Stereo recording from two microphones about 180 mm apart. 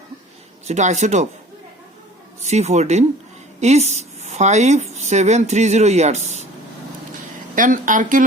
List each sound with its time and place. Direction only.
0.7 s speech: 40° right (ahead or behind)
2.4 s speech: 40° right (ahead or behind)
7.5 s speech: 45° right (ahead or behind)